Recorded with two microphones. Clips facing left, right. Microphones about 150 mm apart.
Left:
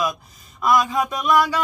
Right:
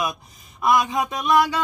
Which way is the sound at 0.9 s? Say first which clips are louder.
Left 1 dB; 20° right (ahead or behind).